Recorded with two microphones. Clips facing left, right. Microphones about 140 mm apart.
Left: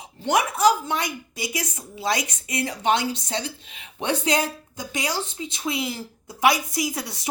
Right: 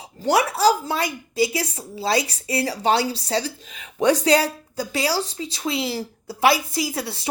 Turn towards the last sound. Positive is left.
turn(degrees=-30)  # may be behind; listen again after turning